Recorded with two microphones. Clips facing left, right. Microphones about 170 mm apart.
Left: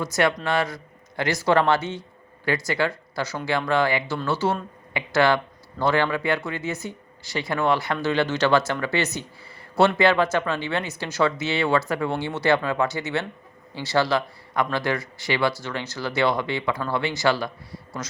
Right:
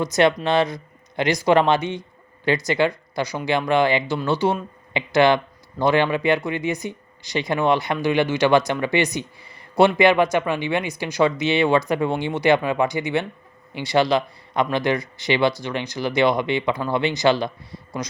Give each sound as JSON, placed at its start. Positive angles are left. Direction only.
{"t": 0.0, "sound": "a man's voice", "side_deg": -20}